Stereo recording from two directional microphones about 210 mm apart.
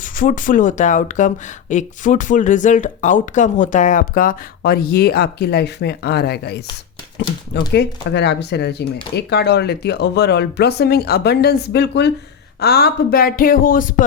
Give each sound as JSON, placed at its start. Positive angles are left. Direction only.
{"t": 0.0, "sound": "speech", "side_deg": 40}
{"t": 7.7, "sound": "speech", "side_deg": 55}